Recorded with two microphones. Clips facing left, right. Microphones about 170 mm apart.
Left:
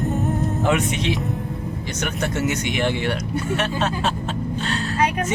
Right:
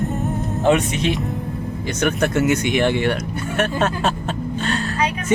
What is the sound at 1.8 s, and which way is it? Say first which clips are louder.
Speech: right 8 dB; 55° right (ahead or behind).